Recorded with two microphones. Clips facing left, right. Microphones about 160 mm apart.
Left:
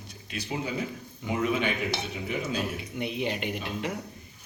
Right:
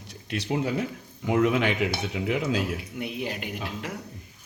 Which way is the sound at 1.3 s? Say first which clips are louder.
Right 5 dB; 85° right.